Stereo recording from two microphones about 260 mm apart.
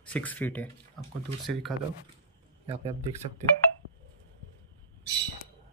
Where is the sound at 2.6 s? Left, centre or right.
Right.